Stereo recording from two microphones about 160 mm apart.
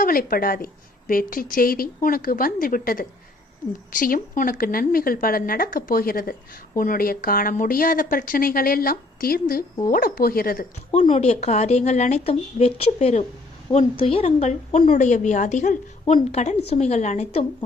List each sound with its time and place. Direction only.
0.0 s a woman's voice: 65° left (ahead or behind)
10.9 s a woman's voice: 45° left (ahead or behind)